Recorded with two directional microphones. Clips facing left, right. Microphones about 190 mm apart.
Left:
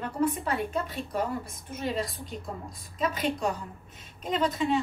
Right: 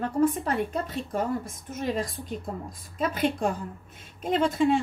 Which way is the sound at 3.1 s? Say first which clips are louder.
Right 5 dB; 50° right (ahead or behind).